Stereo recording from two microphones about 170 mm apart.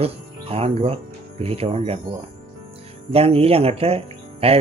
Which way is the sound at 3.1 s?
35° right (ahead or behind).